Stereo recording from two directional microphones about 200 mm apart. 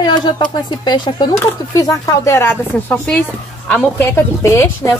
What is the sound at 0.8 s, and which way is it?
Speech, 20° left (ahead or behind).